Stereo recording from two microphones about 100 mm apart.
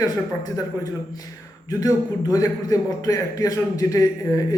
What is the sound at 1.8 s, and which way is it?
A man's voice, 35° left (ahead or behind).